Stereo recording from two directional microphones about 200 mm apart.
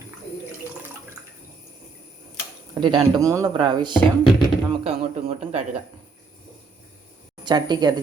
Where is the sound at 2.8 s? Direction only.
20° right (ahead or behind).